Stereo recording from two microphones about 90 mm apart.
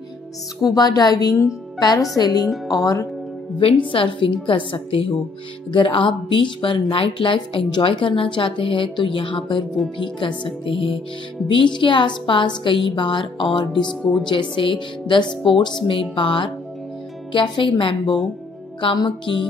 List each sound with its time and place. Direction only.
0.6 s speech: 45° left (ahead or behind)
3.5 s a woman's voice: 65° left (ahead or behind)
11.4 s speech: 65° left (ahead or behind)
13.7 s speech: 5° left (ahead or behind)
14.2 s speech: 65° left (ahead or behind)